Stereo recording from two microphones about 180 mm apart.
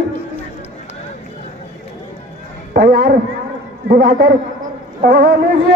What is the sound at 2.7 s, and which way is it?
A man's voice, 60° right (ahead or behind).